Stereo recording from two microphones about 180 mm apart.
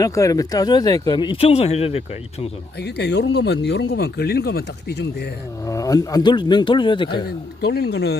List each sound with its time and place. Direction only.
0.0 s speech: 20° left (ahead or behind); by 2.5 s 35° left (ahead or behind)
2.7 s speech: 65° left (ahead or behind)
5.6 s speech: 20° left (ahead or behind)
7.6 s speech: 65° left (ahead or behind)